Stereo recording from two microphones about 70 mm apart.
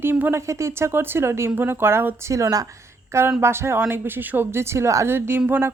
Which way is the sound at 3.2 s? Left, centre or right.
Right.